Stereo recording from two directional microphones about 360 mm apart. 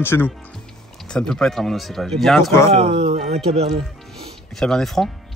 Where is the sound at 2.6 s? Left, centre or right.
Centre.